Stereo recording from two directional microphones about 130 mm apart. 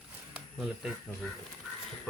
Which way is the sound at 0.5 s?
5° right (ahead or behind).